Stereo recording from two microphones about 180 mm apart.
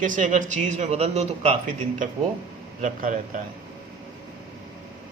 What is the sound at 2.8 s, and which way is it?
Speech, 45° right (ahead or behind).